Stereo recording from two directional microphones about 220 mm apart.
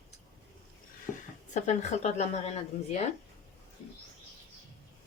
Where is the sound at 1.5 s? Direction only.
30° left (ahead or behind).